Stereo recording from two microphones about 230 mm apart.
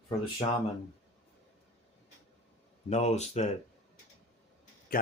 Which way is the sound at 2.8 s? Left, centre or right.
Left.